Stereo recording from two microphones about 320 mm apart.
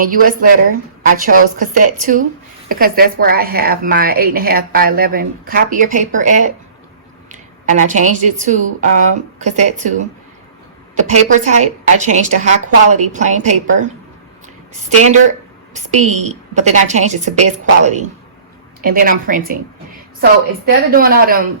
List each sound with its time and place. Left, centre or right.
0.0 s a woman's voice: right
10.9 s a woman's voice: right
14.4 s a sound: right
16.1 s a woman's voice: right
20.7 s a woman's voice: right